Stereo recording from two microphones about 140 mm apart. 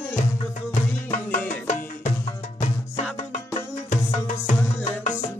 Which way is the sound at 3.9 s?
60° left (ahead or behind).